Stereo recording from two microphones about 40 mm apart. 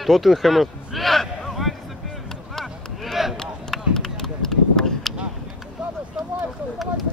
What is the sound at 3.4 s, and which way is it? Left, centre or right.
Run, centre.